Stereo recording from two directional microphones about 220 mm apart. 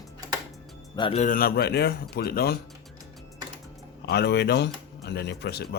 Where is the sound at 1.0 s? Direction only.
30° left (ahead or behind); by 2.5 s 45° left (ahead or behind).